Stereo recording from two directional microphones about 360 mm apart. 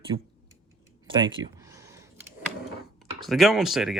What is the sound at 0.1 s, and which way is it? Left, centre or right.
Speech, right.